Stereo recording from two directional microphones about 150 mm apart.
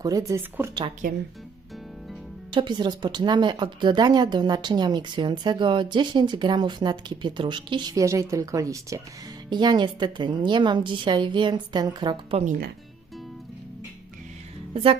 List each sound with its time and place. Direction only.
0.0 s speech: 25° right (ahead or behind)
1.0 s speech: 75° right (ahead or behind)
2.5 s a woman's voice: 30° right (ahead or behind)
14.7 s speech: 40° right (ahead or behind)